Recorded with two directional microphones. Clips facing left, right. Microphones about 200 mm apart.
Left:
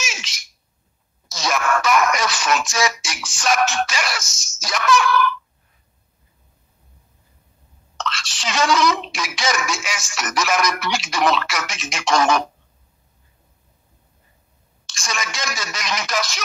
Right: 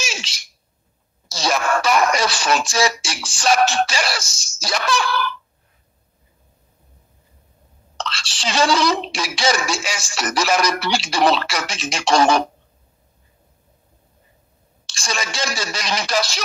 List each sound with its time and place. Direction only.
0.0 s a sound: 30° right (ahead or behind)
1.3 s speech: 30° right (ahead or behind)
8.0 s speech: 30° right (ahead or behind)
14.9 s speech: 30° right (ahead or behind)